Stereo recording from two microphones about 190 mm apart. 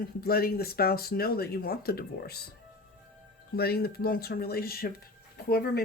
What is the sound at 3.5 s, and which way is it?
Speech, 55° left (ahead or behind).